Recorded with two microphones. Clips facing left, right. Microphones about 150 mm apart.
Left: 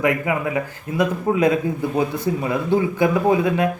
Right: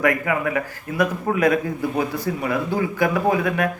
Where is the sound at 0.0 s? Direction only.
20° left (ahead or behind).